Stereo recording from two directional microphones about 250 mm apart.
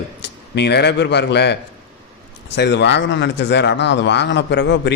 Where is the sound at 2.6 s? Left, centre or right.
Left.